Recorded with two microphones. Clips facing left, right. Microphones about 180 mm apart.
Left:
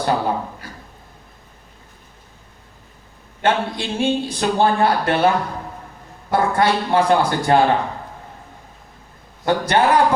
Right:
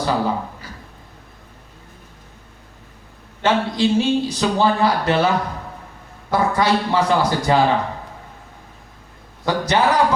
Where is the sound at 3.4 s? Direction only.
55° left (ahead or behind).